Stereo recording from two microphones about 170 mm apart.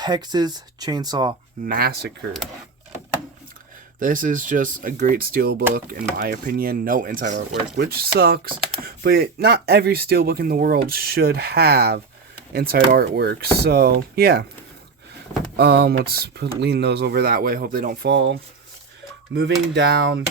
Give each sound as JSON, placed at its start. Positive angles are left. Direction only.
{"t": 0.0, "sound": "speech", "side_deg": -25}
{"t": 1.6, "sound": "speech", "side_deg": -60}
{"t": 4.0, "sound": "speech", "side_deg": -50}
{"t": 7.8, "sound": "speech", "side_deg": -60}
{"t": 15.5, "sound": "speech", "side_deg": -65}
{"t": 16.6, "sound": "speech", "side_deg": -80}
{"t": 19.3, "sound": "speech", "side_deg": -70}
{"t": 19.7, "sound": "speech", "side_deg": -90}